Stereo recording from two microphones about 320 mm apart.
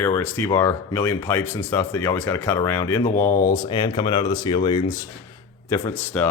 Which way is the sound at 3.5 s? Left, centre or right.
Centre.